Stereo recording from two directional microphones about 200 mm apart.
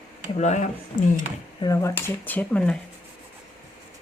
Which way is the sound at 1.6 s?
15° left (ahead or behind).